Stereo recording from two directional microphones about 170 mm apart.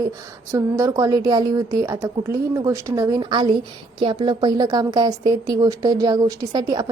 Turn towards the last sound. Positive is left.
turn(degrees=-25)  # may be behind; listen again after turning